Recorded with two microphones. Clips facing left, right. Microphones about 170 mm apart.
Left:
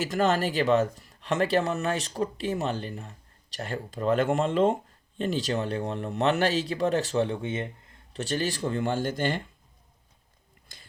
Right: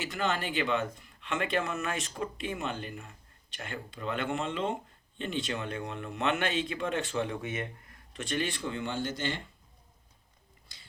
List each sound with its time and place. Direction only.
0.0 s speech: 45° left (ahead or behind)